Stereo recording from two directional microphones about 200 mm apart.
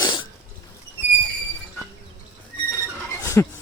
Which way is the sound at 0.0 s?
25° left (ahead or behind).